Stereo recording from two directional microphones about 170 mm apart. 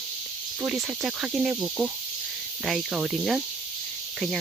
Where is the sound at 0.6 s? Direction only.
5° right (ahead or behind).